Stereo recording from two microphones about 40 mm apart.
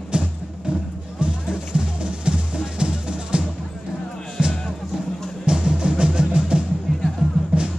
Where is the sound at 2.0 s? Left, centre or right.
Right.